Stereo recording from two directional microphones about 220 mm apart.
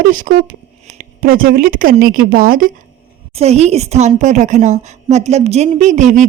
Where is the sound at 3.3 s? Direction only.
30° right (ahead or behind).